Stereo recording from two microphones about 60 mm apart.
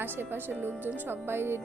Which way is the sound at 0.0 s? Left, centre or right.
Right.